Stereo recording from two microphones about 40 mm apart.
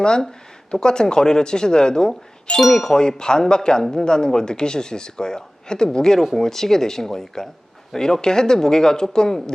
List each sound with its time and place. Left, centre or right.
0.0 s speech: centre
2.6 s speech: centre
6.1 s speech: centre